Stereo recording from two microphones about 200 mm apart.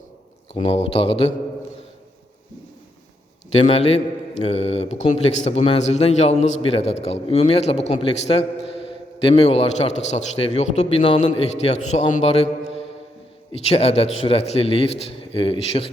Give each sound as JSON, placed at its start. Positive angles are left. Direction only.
{"t": 0.5, "sound": "speech", "side_deg": 30}
{"t": 3.5, "sound": "a man's voice", "side_deg": 30}